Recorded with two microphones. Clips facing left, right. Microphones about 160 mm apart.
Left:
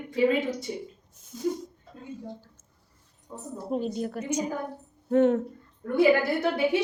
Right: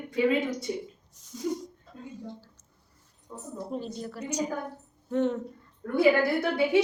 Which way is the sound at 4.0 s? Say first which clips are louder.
Left 3 dB; 55° left (ahead or behind).